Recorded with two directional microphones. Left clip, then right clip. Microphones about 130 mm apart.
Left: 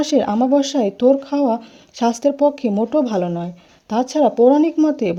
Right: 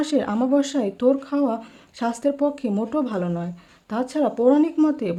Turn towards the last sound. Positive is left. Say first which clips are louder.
# left 4 dB
turn(degrees=35)  # may be behind; listen again after turning